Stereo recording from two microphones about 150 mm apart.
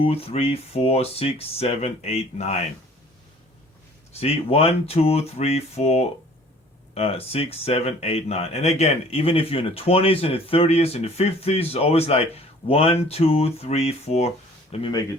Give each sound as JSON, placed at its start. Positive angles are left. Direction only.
{"t": 0.0, "sound": "speech", "side_deg": 40}
{"t": 4.2, "sound": "speech", "side_deg": 40}